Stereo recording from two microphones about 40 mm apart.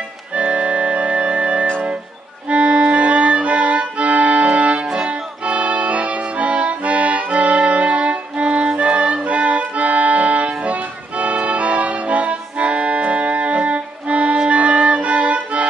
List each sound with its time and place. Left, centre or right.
0.3 s organ: right
2.4 s accordion: right
5.0 s music: right
6.1 s accordion: right